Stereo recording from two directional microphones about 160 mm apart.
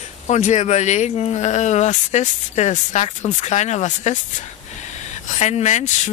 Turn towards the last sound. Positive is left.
turn(degrees=50)  # may be behind; listen again after turning